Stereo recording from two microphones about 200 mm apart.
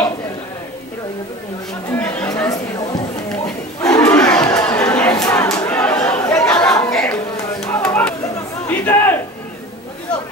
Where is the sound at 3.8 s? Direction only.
15° left (ahead or behind).